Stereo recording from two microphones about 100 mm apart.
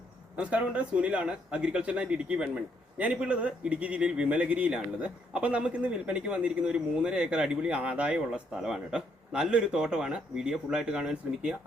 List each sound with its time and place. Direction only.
0.3 s speech: 10° right (ahead or behind)